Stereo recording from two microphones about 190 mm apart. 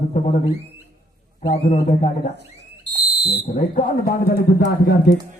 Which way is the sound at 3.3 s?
35° left (ahead or behind).